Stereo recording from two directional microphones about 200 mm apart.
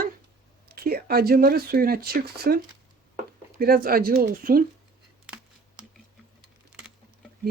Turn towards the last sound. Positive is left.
turn(degrees=-5)  # may be behind; listen again after turning